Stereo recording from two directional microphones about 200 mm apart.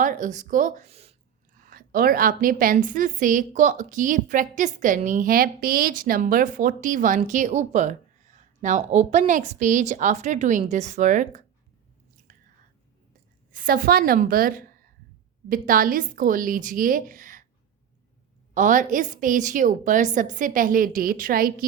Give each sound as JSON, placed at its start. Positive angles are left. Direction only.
{"t": 0.0, "sound": "a woman's voice", "side_deg": -40}
{"t": 1.6, "sound": "a woman's voice", "side_deg": -45}
{"t": 12.3, "sound": "chewing", "side_deg": -40}
{"t": 13.5, "sound": "a woman's voice", "side_deg": -45}
{"t": 18.5, "sound": "a woman's voice", "side_deg": -40}